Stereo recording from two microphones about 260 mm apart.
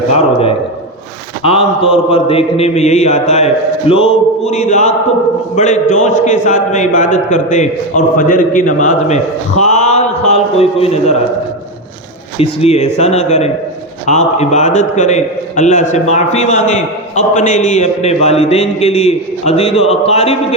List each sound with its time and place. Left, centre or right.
1.4 s a man's voice: left
12.4 s a man's voice: left